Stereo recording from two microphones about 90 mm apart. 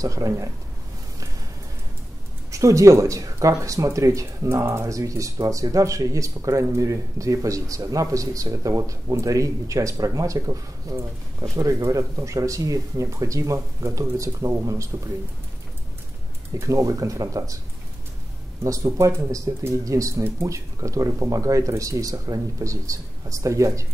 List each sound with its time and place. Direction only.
0.0 s speech: 40° right (ahead or behind)
2.5 s speech: 35° right (ahead or behind)
16.5 s speech: 35° right (ahead or behind)
18.6 s speech: 35° right (ahead or behind)